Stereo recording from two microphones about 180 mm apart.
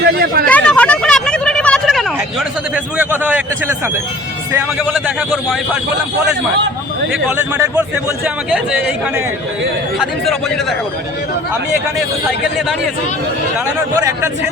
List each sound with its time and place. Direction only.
0.0 s speech: 60° right (ahead or behind)
0.4 s a sound: 5° left (ahead or behind)
2.7 s a man's voice: 10° right (ahead or behind)
4.9 s speech: 5° right (ahead or behind)
7.1 s a man's voice: 10° right (ahead or behind)
10.0 s speech: centre (ahead or behind)
13.9 s a man's voice: 15° right (ahead or behind)